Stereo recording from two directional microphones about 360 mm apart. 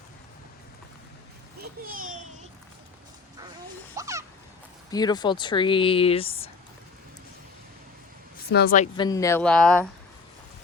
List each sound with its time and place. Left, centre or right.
1.8 s a child's voice: right
3.9 s fowl: centre
4.9 s speech: centre
8.4 s speech: left; by 9.8 s centre